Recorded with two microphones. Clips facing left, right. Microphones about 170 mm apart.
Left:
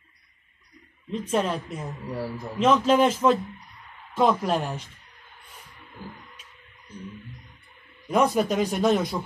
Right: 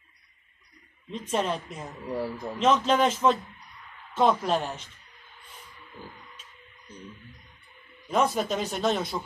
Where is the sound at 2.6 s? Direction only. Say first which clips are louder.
Left 3 dB; 5° left (ahead or behind).